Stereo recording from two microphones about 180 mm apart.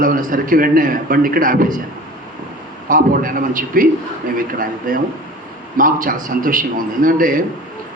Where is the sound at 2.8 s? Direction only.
50° right (ahead or behind).